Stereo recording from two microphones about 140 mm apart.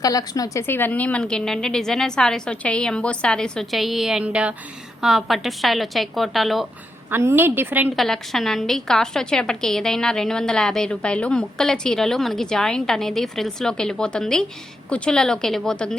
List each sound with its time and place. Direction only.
0.0 s a woman's voice: 25° left (ahead or behind); by 6.7 s centre (ahead or behind)
7.1 s a woman's voice: 15° right (ahead or behind)
7.9 s a woman's voice: centre (ahead or behind)